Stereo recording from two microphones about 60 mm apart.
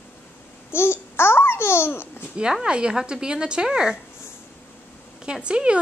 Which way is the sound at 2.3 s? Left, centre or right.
Centre.